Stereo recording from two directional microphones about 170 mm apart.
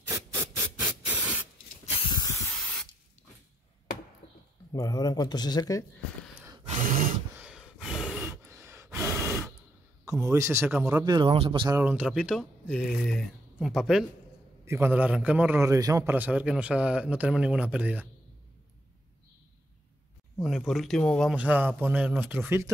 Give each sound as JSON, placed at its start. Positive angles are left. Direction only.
{"t": 0.7, "sound": "spray", "side_deg": -10}
{"t": 2.0, "sound": "spray", "side_deg": 25}
{"t": 4.7, "sound": "speech", "side_deg": 20}
{"t": 6.6, "sound": "a sound", "side_deg": -45}
{"t": 7.3, "sound": "gasp", "side_deg": -5}
{"t": 8.2, "sound": "gasp", "side_deg": -15}
{"t": 10.0, "sound": "a man's voice", "side_deg": -20}
{"t": 11.1, "sound": "speech", "side_deg": -30}
{"t": 11.7, "sound": "speech", "side_deg": -10}
{"t": 14.6, "sound": "a man's voice", "side_deg": -15}
{"t": 20.4, "sound": "a man's voice", "side_deg": 0}